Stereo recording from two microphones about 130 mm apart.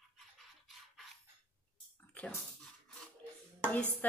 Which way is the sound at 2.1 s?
10° left (ahead or behind).